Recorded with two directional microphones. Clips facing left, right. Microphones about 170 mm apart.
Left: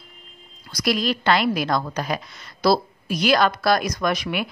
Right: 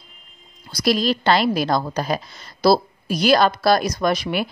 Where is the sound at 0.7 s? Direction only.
30° right (ahead or behind).